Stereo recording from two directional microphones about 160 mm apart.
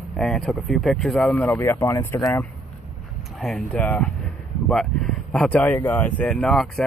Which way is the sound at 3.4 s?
5° left (ahead or behind).